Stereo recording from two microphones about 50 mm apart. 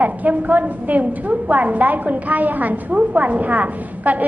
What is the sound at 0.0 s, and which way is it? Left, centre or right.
A woman's voice, right.